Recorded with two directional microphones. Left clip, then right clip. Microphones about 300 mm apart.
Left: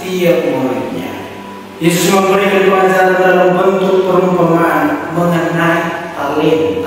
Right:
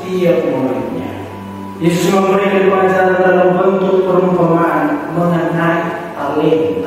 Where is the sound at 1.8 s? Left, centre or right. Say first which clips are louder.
Left 2 dB; centre.